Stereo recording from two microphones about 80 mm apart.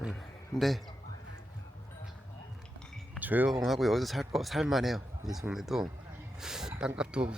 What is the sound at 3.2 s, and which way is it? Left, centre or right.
Speech, right.